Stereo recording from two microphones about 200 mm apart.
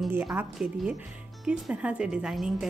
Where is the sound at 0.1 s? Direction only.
10° right (ahead or behind).